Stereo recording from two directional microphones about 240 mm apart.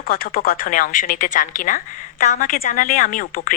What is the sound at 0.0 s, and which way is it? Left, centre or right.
Speech, left.